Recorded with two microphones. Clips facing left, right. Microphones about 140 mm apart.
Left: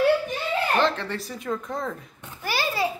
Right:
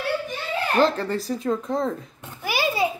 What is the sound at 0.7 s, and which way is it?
Speech, 40° right (ahead or behind).